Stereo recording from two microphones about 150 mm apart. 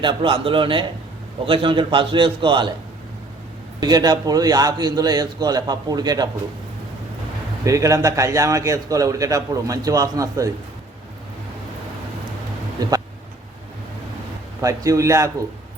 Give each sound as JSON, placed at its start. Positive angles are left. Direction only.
{"t": 0.0, "sound": "a man's voice", "side_deg": -35}
{"t": 3.8, "sound": "a man's voice", "side_deg": -30}
{"t": 7.6, "sound": "a man's voice", "side_deg": -20}
{"t": 12.8, "sound": "a man's voice", "side_deg": -25}
{"t": 14.6, "sound": "a man's voice", "side_deg": -20}